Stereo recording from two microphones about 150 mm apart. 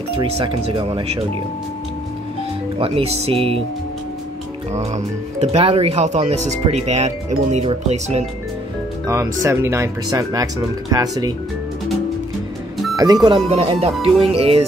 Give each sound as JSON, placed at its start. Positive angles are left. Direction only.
{"t": 0.1, "sound": "speech", "side_deg": -40}
{"t": 2.8, "sound": "speech", "side_deg": -40}
{"t": 4.7, "sound": "speech", "side_deg": -50}
{"t": 9.0, "sound": "speech", "side_deg": -20}
{"t": 12.9, "sound": "speech", "side_deg": -25}
{"t": 13.5, "sound": "speech", "side_deg": -45}